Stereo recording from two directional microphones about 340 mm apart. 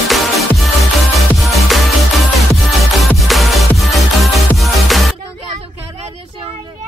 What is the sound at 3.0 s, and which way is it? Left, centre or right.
Music, centre.